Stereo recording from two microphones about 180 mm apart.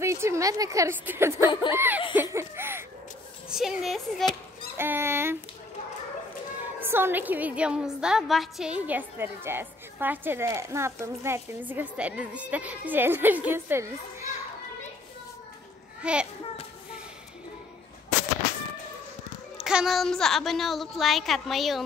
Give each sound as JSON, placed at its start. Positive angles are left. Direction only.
{"t": 0.0, "sound": "a woman's voice", "side_deg": -15}
{"t": 2.3, "sound": "a sound", "side_deg": -15}
{"t": 3.4, "sound": "a woman's voice", "side_deg": 0}
{"t": 4.7, "sound": "speech", "side_deg": -10}
{"t": 6.8, "sound": "a woman's voice", "side_deg": -10}
{"t": 16.0, "sound": "a child's voice", "side_deg": -5}
{"t": 19.5, "sound": "a woman's voice", "side_deg": 0}